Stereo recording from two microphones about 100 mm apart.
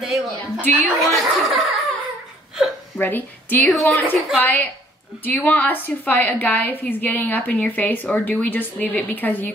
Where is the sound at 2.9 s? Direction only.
20° left (ahead or behind).